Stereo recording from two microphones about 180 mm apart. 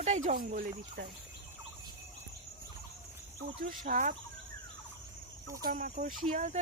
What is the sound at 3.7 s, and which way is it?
Speech, 50° right (ahead or behind).